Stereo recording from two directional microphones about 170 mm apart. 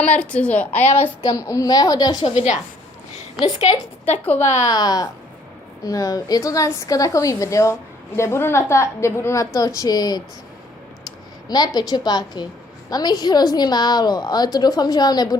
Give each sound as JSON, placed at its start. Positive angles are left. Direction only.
{"t": 0.0, "sound": "a woman's voice", "side_deg": 5}
{"t": 2.3, "sound": "a woman's voice", "side_deg": 40}
{"t": 4.6, "sound": "a woman's voice", "side_deg": 20}
{"t": 11.4, "sound": "a woman's voice", "side_deg": 25}